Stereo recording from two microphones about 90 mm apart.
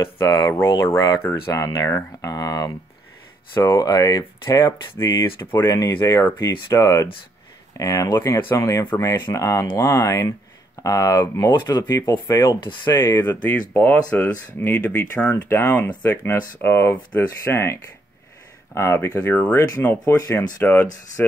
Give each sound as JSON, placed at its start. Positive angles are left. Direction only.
{"t": 0.0, "sound": "speech", "side_deg": 30}
{"t": 3.8, "sound": "speech", "side_deg": 45}
{"t": 5.9, "sound": "speech", "side_deg": 35}
{"t": 11.7, "sound": "speech", "side_deg": 50}
{"t": 12.9, "sound": "speech", "side_deg": 30}
{"t": 18.8, "sound": "speech", "side_deg": 30}